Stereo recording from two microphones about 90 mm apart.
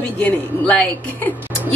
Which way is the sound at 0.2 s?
15° left (ahead or behind).